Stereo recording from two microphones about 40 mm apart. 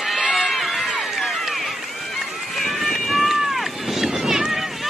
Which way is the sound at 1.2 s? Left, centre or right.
Centre.